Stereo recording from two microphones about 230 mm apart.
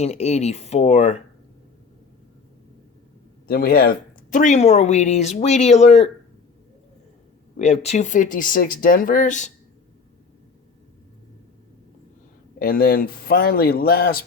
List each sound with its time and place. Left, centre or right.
0.0 s speech: left
3.4 s speech: left
7.5 s speech: left
12.5 s speech: left